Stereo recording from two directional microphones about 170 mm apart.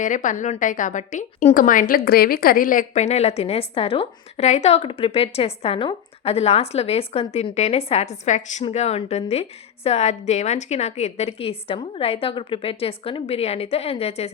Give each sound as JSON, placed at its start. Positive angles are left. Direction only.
{"t": 0.0, "sound": "a woman's voice", "side_deg": 50}